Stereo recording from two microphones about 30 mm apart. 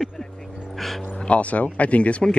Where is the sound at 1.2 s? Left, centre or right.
Left.